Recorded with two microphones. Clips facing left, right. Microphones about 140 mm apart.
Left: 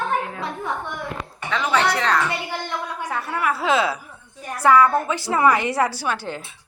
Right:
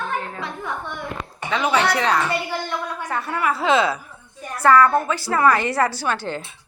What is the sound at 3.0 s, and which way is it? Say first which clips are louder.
A woman's voice: even; 5° left (ahead or behind).